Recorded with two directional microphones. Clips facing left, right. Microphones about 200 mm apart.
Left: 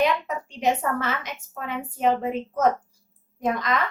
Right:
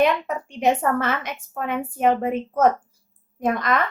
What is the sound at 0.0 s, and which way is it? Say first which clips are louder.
A woman's voice: right 3 dB; 55° right (ahead or behind).